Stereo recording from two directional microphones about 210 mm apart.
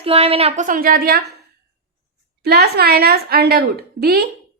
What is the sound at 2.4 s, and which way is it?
A woman's voice, 50° right (ahead or behind).